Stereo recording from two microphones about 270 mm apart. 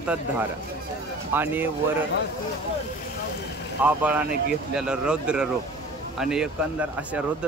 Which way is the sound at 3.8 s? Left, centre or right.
Centre.